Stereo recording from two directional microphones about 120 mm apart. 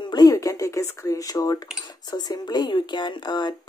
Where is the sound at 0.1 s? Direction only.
30° left (ahead or behind).